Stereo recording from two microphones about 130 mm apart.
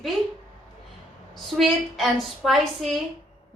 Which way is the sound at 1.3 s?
Centre (ahead or behind).